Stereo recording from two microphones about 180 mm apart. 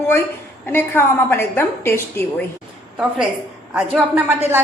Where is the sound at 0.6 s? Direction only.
10° left (ahead or behind).